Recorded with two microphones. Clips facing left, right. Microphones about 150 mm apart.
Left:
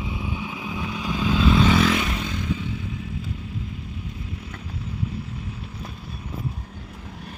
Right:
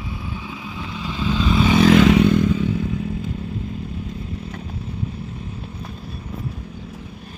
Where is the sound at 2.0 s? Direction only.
80° right.